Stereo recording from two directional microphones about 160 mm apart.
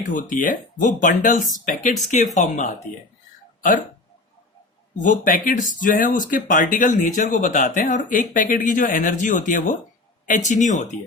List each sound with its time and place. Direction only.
0.1 s speech: 55° left (ahead or behind)
4.9 s speech: 55° left (ahead or behind)